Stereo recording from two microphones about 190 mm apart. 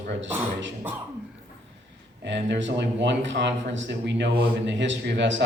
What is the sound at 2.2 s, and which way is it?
Speech, 70° right (ahead or behind).